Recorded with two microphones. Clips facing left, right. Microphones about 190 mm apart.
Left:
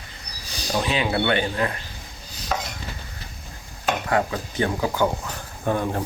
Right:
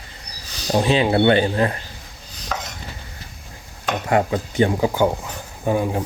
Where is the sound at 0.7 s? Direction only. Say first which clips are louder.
Right 6 dB; 30° right (ahead or behind).